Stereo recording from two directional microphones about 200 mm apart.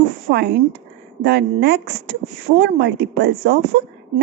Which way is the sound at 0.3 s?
55° right (ahead or behind).